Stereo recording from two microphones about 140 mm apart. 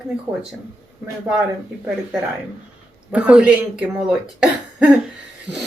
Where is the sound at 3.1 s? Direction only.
10° right (ahead or behind).